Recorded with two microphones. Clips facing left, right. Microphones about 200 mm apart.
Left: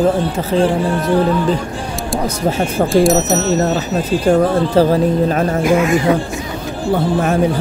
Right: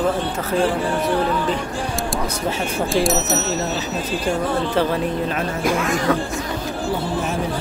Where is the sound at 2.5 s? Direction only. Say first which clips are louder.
Left 8 dB; 45° left (ahead or behind).